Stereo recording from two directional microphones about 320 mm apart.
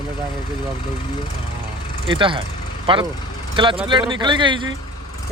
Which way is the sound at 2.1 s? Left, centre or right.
Centre.